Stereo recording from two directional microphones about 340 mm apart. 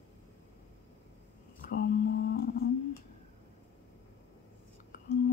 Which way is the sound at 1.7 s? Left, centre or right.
Left.